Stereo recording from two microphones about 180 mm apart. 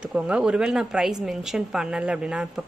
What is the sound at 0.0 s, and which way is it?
Speech, 5° right (ahead or behind).